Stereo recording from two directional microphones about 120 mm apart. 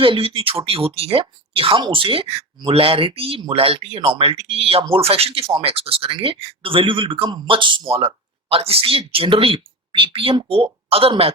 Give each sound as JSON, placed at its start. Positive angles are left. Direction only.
{"t": 0.0, "sound": "speech", "side_deg": -50}